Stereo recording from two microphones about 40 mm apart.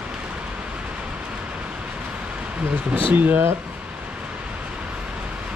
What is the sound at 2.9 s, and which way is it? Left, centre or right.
Speech, right.